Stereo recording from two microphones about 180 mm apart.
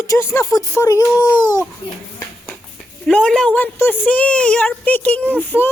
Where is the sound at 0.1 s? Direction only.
15° left (ahead or behind).